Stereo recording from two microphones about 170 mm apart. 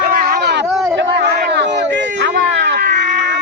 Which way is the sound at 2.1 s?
90° right.